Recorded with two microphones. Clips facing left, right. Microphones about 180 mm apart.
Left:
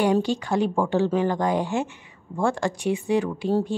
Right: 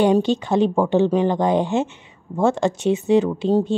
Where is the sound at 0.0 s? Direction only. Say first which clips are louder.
Right 5 dB; 20° right (ahead or behind).